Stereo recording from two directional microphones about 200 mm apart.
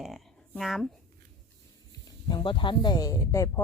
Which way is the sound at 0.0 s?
Centre (ahead or behind).